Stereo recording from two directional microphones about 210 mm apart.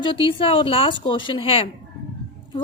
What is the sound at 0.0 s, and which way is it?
A woman's voice, 25° left (ahead or behind).